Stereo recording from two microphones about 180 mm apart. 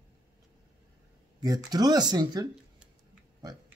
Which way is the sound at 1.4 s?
20° right (ahead or behind).